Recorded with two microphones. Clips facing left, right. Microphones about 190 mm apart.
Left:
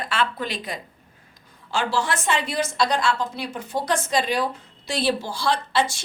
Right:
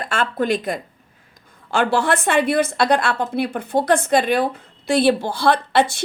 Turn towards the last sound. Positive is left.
turn(degrees=-55)  # may be behind; listen again after turning